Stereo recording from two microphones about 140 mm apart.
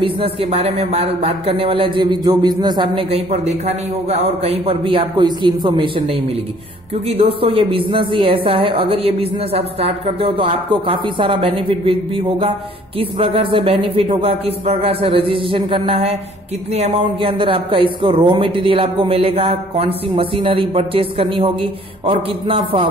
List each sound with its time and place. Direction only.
0.0 s speech: 40° right (ahead or behind)
7.1 s a man's voice: 40° right (ahead or behind)